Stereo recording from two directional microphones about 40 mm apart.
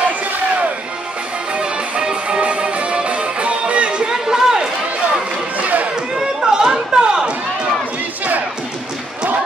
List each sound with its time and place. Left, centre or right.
1.5 s music: right
4.1 s chatter: centre
5.6 s run: right
6.1 s chatter: centre